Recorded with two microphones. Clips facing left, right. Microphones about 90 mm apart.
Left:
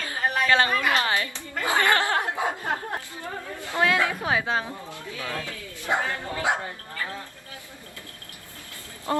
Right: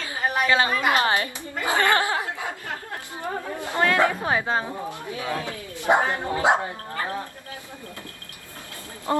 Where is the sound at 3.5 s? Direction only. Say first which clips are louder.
Right 3 dB; 20° right (ahead or behind).